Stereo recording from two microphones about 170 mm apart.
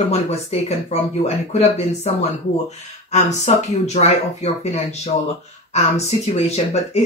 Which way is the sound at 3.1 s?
40° left (ahead or behind).